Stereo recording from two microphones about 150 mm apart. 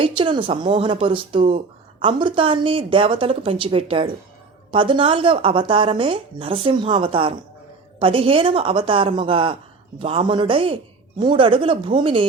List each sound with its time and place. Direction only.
0.0 s speech: 35° right (ahead or behind)